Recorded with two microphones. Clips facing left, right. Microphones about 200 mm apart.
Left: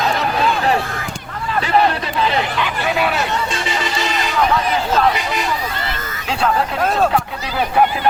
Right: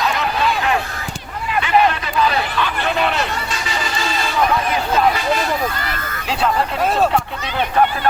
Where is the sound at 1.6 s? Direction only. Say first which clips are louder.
Even; 35° left (ahead or behind); by 3.3 s 5° left (ahead or behind).